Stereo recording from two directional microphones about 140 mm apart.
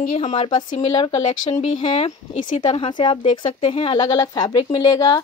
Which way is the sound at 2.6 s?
35° left (ahead or behind).